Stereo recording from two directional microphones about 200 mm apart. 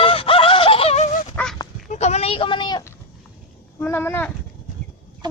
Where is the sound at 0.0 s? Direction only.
25° left (ahead or behind).